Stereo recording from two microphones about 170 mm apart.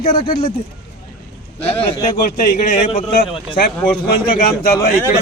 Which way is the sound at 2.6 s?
45° left (ahead or behind).